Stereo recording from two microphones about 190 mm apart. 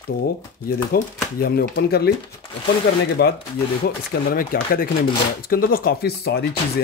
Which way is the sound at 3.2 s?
60° left (ahead or behind).